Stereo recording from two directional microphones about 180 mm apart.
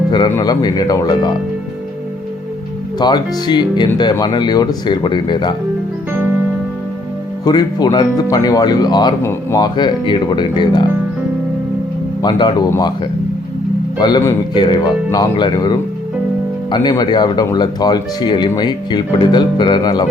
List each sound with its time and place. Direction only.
0.1 s speech: 20° left (ahead or behind)
3.0 s speech: 25° left (ahead or behind)
7.4 s speech: 25° left (ahead or behind)
12.2 s speech: 25° left (ahead or behind)
14.0 s speech: 20° left (ahead or behind)